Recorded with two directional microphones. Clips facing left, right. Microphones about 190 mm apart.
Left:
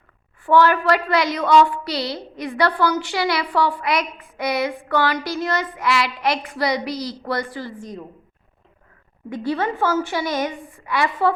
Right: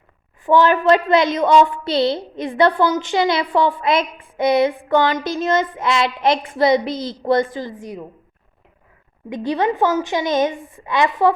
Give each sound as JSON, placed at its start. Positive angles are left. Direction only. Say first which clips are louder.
{"t": 0.4, "sound": "a woman's voice", "louder": "right 2 dB", "side_deg": -20}
{"t": 9.3, "sound": "a woman's voice", "louder": "right 3 dB", "side_deg": -20}